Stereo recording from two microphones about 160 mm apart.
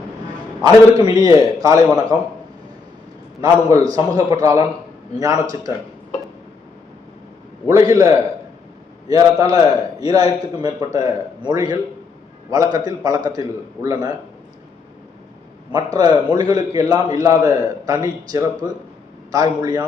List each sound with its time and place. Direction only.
0.6 s a man's voice: 25° right (ahead or behind)
3.4 s a man's voice: 25° right (ahead or behind)
7.7 s a man's voice: 20° right (ahead or behind)
15.7 s a man's voice: 25° right (ahead or behind)